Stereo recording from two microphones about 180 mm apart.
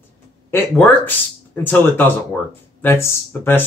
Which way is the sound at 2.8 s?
15° left (ahead or behind).